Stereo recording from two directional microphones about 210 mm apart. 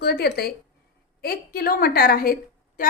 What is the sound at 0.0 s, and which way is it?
A woman's voice, 50° left (ahead or behind).